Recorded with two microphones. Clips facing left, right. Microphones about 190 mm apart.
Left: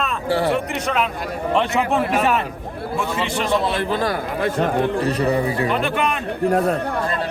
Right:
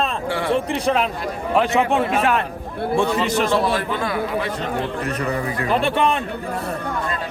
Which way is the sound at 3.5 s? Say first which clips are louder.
Right 1 dB; 25° left (ahead or behind).